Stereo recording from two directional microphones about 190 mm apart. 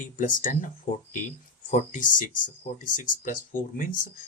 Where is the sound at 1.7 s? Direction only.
45° left (ahead or behind).